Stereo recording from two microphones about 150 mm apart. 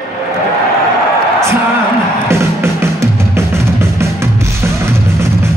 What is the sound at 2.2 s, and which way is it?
Music, 15° right (ahead or behind).